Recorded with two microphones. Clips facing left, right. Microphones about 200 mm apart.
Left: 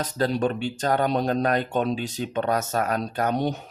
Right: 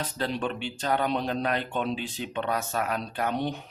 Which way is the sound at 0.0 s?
45° left (ahead or behind).